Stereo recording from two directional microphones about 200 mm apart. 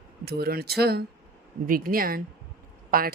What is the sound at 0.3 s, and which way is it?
Speech, 50° right (ahead or behind).